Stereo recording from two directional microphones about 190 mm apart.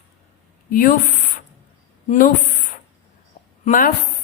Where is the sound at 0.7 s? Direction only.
45° left (ahead or behind).